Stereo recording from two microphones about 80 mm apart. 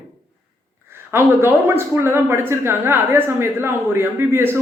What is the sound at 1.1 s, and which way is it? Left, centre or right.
A woman's voice, right.